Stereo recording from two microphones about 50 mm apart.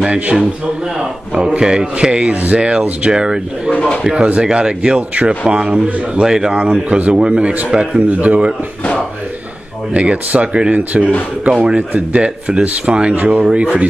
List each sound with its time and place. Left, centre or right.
0.0 s speech: right
8.2 s speech: right
9.9 s speech: right
11.5 s speech: centre